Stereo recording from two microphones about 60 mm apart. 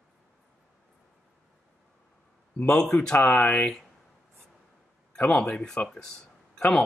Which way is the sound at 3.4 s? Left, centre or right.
Left.